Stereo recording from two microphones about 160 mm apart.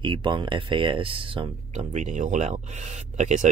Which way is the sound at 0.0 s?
30° right (ahead or behind).